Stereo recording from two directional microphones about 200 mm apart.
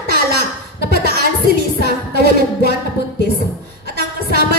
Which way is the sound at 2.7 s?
55° left (ahead or behind).